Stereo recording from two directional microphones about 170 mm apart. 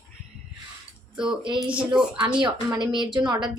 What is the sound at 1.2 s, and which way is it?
Speech, 30° right (ahead or behind).